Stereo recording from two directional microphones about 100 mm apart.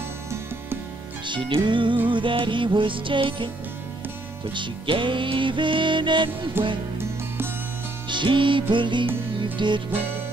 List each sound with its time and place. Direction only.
1.2 s music: 55° right (ahead or behind)
4.6 s music: 55° right (ahead or behind)
6.6 s music: 20° right (ahead or behind)
8.1 s music: 55° right (ahead or behind)